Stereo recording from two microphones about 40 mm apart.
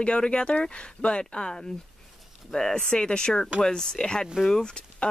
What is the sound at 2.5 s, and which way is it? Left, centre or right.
Speech, centre.